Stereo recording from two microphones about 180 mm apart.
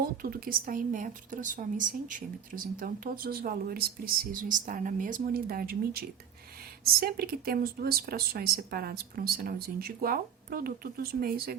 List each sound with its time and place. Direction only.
0.0 s speech: 55° right (ahead or behind)